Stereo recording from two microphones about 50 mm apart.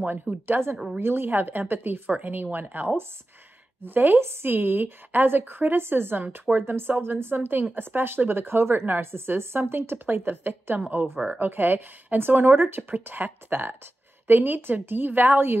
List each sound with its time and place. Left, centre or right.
0.0 s a woman's voice: right
4.2 s a woman's voice: right